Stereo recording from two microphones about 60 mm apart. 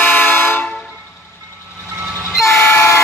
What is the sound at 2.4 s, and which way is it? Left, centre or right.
Train, left.